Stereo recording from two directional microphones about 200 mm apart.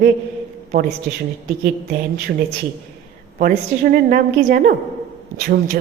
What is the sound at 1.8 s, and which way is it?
Speech, 50° right (ahead or behind).